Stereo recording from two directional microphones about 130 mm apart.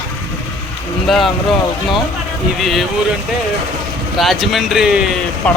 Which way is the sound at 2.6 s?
Centre (ahead or behind).